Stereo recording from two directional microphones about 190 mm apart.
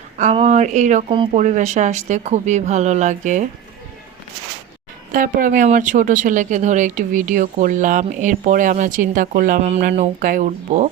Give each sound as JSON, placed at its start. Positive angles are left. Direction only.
{"t": 0.2, "sound": "speech", "side_deg": -35}
{"t": 1.1, "sound": "speech", "side_deg": -25}
{"t": 1.4, "sound": "speech", "side_deg": -40}
{"t": 5.1, "sound": "speech", "side_deg": -45}